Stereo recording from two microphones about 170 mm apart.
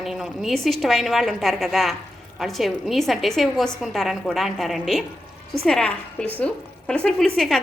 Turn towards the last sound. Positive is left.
turn(degrees=5)  # may be behind; listen again after turning